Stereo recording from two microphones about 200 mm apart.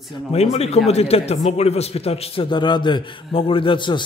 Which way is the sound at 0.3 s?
30° left (ahead or behind).